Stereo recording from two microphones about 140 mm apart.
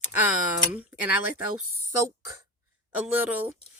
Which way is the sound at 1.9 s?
25° right (ahead or behind).